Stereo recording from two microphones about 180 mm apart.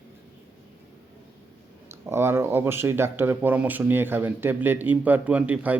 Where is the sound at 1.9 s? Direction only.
15° right (ahead or behind).